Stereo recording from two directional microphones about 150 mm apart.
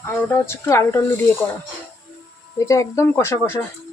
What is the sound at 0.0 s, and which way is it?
Speech, 15° left (ahead or behind).